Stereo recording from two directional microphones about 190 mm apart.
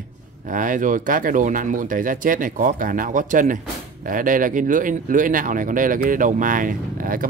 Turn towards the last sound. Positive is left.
turn(degrees=-45)  # may be behind; listen again after turning